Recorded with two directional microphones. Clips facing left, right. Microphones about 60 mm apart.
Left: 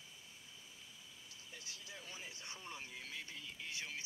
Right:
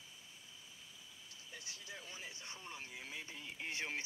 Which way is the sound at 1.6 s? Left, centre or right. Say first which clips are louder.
Right 2 dB; right.